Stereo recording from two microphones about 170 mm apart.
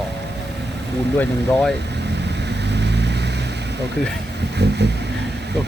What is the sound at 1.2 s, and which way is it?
Speech, 5° left (ahead or behind).